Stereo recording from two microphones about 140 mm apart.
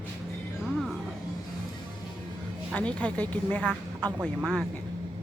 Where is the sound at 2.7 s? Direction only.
10° left (ahead or behind).